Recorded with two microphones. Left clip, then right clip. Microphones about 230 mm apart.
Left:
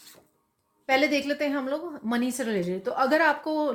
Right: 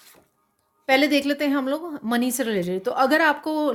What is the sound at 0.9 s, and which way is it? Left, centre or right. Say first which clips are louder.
A woman's voice: right 4 dB; right.